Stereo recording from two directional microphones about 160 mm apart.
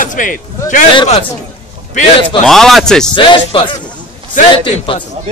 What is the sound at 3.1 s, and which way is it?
Speech, 30° left (ahead or behind).